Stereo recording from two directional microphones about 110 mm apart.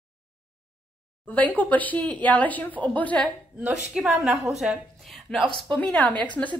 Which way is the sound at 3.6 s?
15° right (ahead or behind).